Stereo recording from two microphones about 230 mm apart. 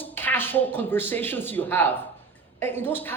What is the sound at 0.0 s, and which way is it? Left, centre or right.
A man's voice, centre.